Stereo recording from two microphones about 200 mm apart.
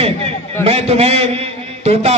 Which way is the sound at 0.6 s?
30° right (ahead or behind).